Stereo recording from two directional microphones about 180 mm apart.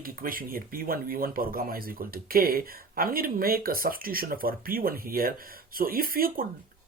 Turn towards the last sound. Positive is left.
turn(degrees=-55)  # may be behind; listen again after turning